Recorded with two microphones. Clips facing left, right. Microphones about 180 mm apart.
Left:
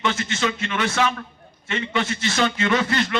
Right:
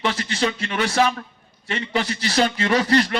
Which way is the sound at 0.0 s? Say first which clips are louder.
Right 1 dB; 35° right (ahead or behind).